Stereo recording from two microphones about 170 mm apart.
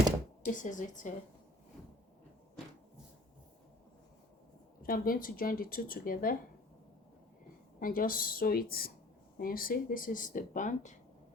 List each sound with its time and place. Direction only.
0.4 s speech: 50° left (ahead or behind)
4.8 s speech: 60° left (ahead or behind)
7.8 s speech: 55° left (ahead or behind)